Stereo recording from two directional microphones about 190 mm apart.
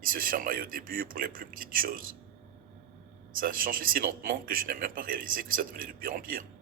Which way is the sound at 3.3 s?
50° right (ahead or behind).